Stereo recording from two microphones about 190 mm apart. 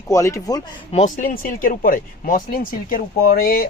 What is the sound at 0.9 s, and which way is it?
Speech, 40° left (ahead or behind).